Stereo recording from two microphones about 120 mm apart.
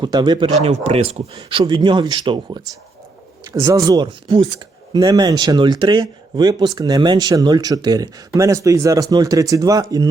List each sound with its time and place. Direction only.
0.0 s speech: 35° right (ahead or behind)
0.6 s speech: 60° right (ahead or behind)
1.5 s speech: 45° right (ahead or behind)
3.5 s speech: 25° right (ahead or behind)